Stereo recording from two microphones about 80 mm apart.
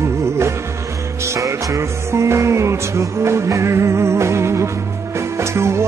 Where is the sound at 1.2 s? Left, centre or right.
Right.